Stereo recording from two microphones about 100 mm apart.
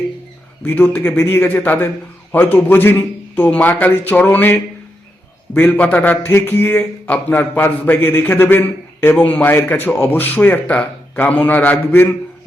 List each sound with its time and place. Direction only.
0.6 s a man's voice: 15° left (ahead or behind)